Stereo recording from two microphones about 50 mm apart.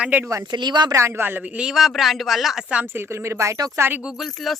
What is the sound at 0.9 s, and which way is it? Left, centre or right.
Speech, right.